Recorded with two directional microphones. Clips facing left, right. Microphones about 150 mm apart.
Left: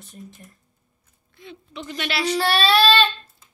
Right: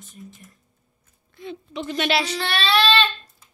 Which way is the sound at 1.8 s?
30° right (ahead or behind).